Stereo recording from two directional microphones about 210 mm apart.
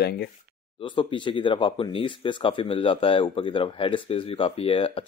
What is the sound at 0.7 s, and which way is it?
Speech, 25° left (ahead or behind).